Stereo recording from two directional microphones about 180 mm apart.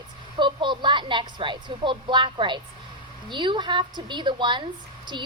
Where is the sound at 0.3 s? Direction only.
25° right (ahead or behind).